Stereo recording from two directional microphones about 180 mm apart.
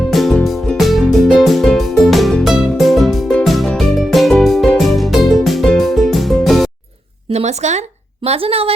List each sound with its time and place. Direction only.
0.1 s music: centre (ahead or behind)
7.3 s a woman's voice: 35° right (ahead or behind)